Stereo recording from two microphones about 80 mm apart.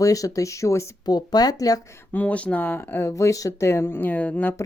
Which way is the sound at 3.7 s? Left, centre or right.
Left.